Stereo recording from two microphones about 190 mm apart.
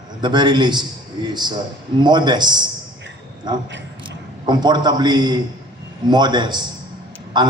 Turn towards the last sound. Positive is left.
turn(degrees=-25)  # may be behind; listen again after turning